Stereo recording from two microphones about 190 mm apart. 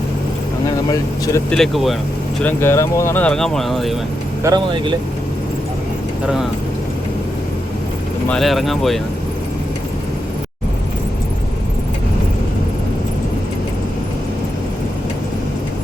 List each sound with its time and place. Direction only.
0.9 s speech: 20° left (ahead or behind)
1.5 s speech: centre (ahead or behind)
2.4 s speech: 10° left (ahead or behind)
4.4 s speech: 25° right (ahead or behind)
6.2 s speech: 5° right (ahead or behind)
8.3 s speech: centre (ahead or behind)